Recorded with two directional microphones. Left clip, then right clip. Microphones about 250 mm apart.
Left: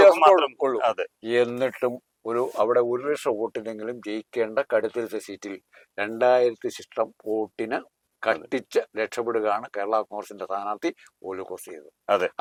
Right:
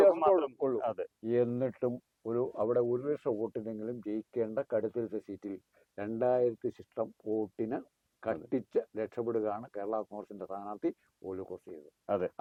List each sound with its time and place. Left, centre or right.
0.0 s speech: centre
7.3 s speech: left
7.5 s speech: centre